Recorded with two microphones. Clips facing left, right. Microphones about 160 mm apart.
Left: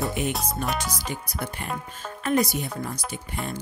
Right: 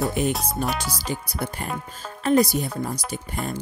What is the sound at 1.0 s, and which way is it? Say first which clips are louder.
Speech: right 3 dB; 35° right (ahead or behind).